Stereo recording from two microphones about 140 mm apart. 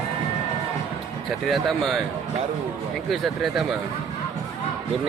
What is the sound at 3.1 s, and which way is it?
Speech, centre (ahead or behind).